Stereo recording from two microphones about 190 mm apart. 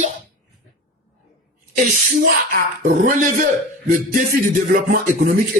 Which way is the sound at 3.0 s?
45° right (ahead or behind).